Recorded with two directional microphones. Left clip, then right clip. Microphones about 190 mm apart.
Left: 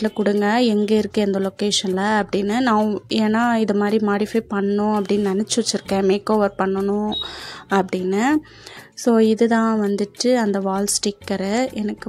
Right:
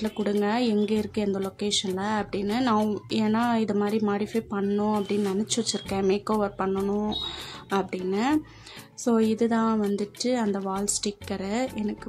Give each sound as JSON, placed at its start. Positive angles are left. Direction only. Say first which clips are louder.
{"t": 0.4, "sound": "speech", "louder": "left 6 dB", "side_deg": 30}
{"t": 7.7, "sound": "speech", "louder": "left 7 dB", "side_deg": 30}